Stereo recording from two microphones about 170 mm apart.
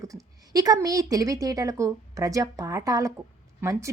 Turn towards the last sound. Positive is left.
turn(degrees=-20)  # may be behind; listen again after turning